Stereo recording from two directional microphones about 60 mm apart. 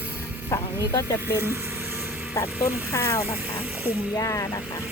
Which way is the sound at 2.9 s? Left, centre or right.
Left.